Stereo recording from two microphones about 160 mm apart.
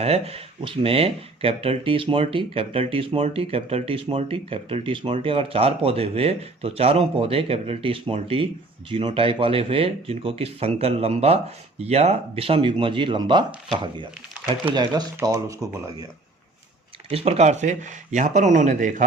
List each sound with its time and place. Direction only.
0.0 s speech: 40° right (ahead or behind); by 16.0 s 20° right (ahead or behind)
17.1 s speech: 40° right (ahead or behind)